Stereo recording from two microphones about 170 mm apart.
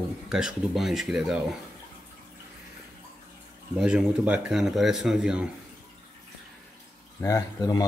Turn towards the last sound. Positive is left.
turn(degrees=20)  # may be behind; listen again after turning